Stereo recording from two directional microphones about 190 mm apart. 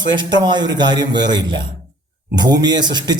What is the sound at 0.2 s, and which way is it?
A man's voice, 25° right (ahead or behind).